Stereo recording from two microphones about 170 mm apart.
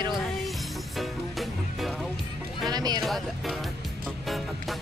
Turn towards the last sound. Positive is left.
turn(degrees=0)  # may be behind; listen again after turning